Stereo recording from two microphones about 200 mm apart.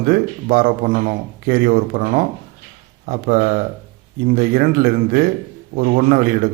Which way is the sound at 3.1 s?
45° right (ahead or behind).